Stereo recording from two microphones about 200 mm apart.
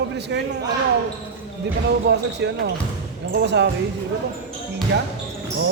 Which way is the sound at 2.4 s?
60° right (ahead or behind).